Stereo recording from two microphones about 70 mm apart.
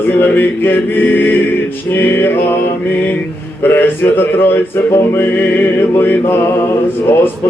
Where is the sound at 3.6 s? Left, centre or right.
Left.